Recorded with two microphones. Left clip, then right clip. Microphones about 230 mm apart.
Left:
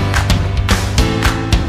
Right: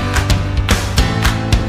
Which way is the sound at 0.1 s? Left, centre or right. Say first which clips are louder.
Left 1 dB; centre.